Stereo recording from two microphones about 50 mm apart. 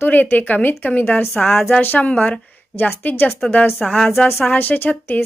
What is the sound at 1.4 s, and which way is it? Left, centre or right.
Speech, centre.